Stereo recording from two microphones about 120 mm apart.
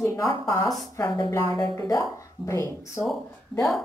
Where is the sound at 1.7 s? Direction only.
25° left (ahead or behind).